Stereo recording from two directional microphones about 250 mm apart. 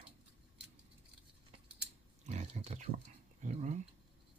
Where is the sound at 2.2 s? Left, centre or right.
Right.